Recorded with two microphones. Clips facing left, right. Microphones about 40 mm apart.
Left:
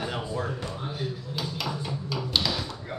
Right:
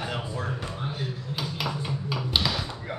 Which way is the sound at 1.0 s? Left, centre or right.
Centre.